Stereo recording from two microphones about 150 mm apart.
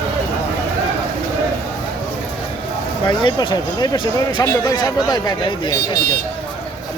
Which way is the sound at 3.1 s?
30° left (ahead or behind).